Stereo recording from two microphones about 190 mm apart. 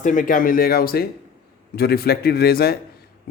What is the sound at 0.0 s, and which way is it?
A man's voice, 45° left (ahead or behind).